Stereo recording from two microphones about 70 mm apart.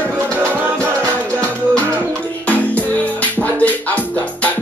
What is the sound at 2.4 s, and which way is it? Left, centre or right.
Music, left.